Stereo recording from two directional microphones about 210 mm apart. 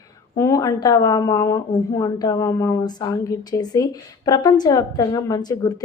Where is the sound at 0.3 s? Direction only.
15° left (ahead or behind).